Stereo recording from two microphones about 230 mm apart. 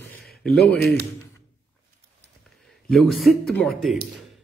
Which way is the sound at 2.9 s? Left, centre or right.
Centre.